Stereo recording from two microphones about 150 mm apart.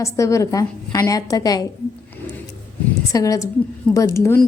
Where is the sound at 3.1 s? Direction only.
20° left (ahead or behind).